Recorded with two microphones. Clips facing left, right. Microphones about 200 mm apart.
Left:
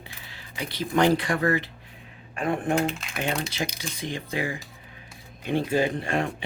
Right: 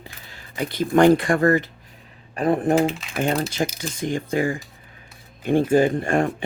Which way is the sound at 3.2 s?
45° right (ahead or behind).